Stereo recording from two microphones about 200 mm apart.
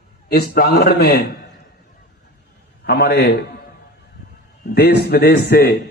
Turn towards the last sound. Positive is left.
turn(degrees=50)  # may be behind; listen again after turning